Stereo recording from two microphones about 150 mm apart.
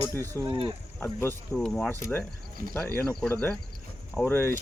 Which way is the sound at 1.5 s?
5° left (ahead or behind).